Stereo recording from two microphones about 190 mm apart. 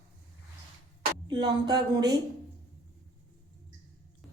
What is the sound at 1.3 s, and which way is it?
Speech, 25° right (ahead or behind).